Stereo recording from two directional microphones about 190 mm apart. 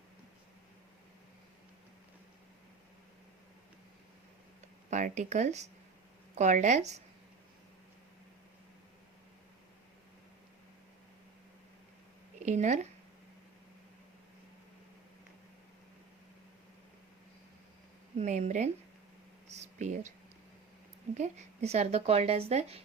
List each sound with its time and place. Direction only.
4.9 s speech: 40° right (ahead or behind)
12.5 s speech: 40° right (ahead or behind)
18.2 s speech: 40° right (ahead or behind)
19.5 s a sound: 35° right (ahead or behind)
21.2 s speech: 35° right (ahead or behind)